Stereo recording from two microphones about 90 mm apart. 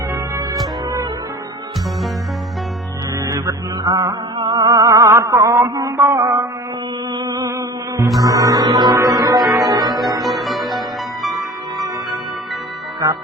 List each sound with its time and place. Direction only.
3.2 s music: 35° right (ahead or behind)
4.4 s music: 65° right (ahead or behind)
4.9 s mantra: 35° right (ahead or behind)
7.1 s music: 55° right (ahead or behind)
7.5 s music: 35° right (ahead or behind)
10.2 s music: centre (ahead or behind)